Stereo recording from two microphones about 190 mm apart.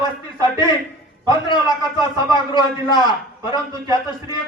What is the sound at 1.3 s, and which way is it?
A man's voice, 25° left (ahead or behind).